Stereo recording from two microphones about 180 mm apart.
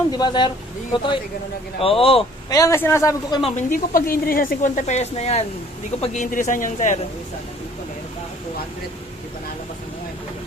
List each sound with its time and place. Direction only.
0.1 s speech: 25° left (ahead or behind)
2.5 s speech: 20° left (ahead or behind)
3.5 s speech: 50° left (ahead or behind)